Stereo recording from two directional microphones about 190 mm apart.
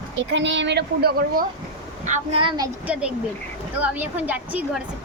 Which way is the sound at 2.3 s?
25° right (ahead or behind).